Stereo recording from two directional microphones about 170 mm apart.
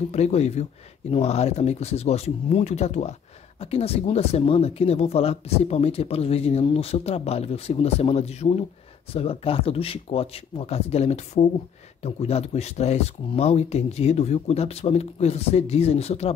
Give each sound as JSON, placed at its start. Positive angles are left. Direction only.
{"t": 0.1, "sound": "speech", "side_deg": 40}